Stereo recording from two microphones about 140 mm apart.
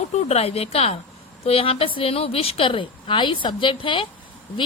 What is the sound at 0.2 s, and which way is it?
A woman's voice, 50° left (ahead or behind).